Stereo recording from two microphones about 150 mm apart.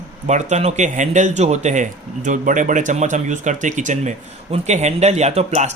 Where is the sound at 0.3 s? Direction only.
50° right (ahead or behind).